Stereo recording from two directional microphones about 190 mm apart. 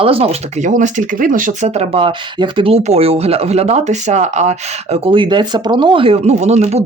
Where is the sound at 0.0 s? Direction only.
30° right (ahead or behind).